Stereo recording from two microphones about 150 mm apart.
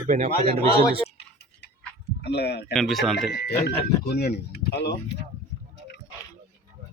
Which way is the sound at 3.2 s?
90° left.